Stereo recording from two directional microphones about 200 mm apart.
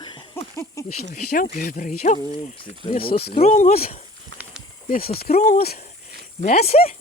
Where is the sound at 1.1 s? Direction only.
40° left (ahead or behind).